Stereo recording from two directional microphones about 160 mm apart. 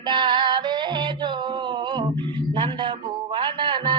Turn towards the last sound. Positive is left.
turn(degrees=-30)  # may be behind; listen again after turning